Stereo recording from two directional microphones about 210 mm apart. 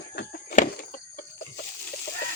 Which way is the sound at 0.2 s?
40° left (ahead or behind).